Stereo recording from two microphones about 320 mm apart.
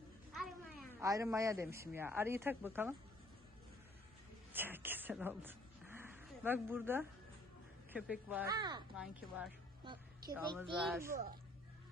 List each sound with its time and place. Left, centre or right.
0.3 s speech: centre
4.5 s a sound: centre
7.9 s speech: centre
9.8 s a woman's voice: centre